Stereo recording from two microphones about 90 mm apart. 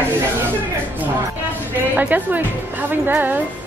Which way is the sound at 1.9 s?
20° right (ahead or behind).